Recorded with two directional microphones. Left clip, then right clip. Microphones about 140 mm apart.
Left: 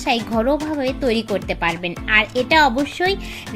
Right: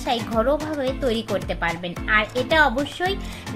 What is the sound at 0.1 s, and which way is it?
Speech, 30° left (ahead or behind).